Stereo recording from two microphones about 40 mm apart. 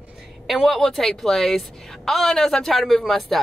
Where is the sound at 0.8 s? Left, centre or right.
Centre.